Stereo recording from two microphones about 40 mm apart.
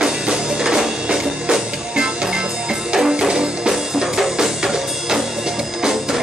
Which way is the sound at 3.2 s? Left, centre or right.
Centre.